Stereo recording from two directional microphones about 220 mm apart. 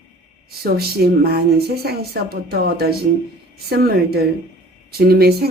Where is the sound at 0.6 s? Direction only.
45° right (ahead or behind).